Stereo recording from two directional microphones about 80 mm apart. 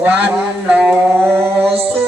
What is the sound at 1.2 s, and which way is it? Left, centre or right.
Music, right.